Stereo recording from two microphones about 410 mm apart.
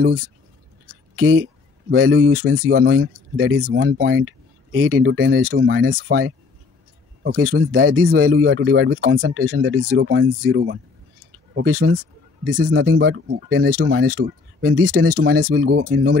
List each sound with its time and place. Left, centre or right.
1.1 s speech: right
7.2 s speech: right